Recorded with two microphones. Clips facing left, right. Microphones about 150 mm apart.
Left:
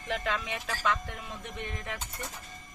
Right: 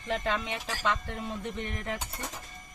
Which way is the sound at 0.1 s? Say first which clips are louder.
Right 2 dB; 25° right (ahead or behind).